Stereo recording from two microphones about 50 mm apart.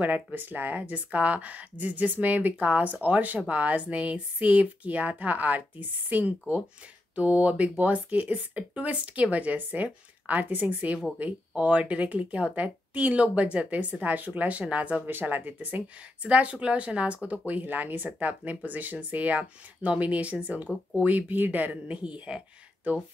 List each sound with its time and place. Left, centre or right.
0.0 s speech: right
15.0 s speech: right
17.5 s speech: right